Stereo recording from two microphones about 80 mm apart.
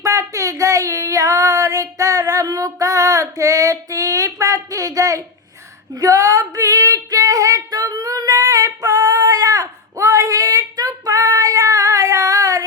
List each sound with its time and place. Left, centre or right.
0.0 s female singing: right